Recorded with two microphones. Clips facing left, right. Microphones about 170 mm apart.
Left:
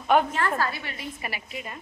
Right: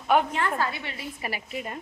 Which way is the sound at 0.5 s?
20° right (ahead or behind).